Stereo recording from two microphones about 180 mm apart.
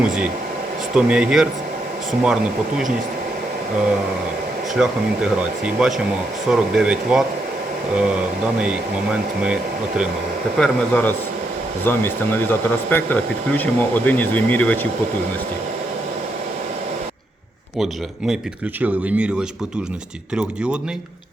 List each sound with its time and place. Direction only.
0.9 s speech: 5° right (ahead or behind)
4.7 s speech: 5° right (ahead or behind)
10.6 s speech: 5° left (ahead or behind)
18.8 s speech: 5° right (ahead or behind)